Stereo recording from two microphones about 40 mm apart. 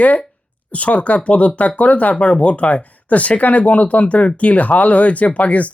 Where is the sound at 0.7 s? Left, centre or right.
Left.